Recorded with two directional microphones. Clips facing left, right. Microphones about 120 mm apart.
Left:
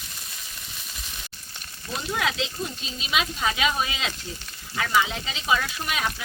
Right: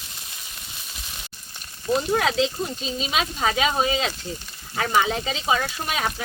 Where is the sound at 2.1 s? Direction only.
40° right (ahead or behind).